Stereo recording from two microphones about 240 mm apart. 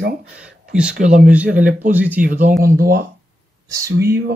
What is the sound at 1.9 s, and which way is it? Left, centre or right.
Speech, centre.